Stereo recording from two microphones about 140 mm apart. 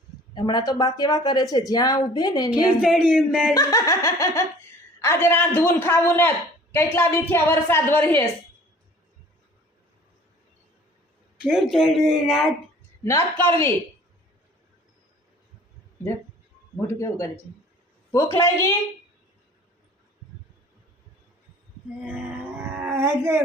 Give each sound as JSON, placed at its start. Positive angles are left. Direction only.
{"t": 0.3, "sound": "speech", "side_deg": 30}
{"t": 2.8, "sound": "speech", "side_deg": -5}
{"t": 3.5, "sound": "a woman's voice", "side_deg": 25}
{"t": 11.3, "sound": "speech", "side_deg": -5}
{"t": 13.1, "sound": "a woman's voice", "side_deg": 15}
{"t": 16.8, "sound": "a woman's voice", "side_deg": 20}
{"t": 22.7, "sound": "a sound", "side_deg": -15}